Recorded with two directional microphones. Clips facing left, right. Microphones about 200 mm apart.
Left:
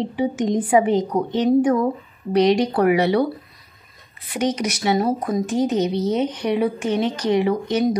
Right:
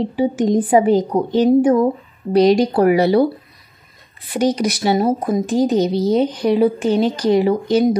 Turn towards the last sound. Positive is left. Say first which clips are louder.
# right 4 dB
turn(degrees=-30)  # may be behind; listen again after turning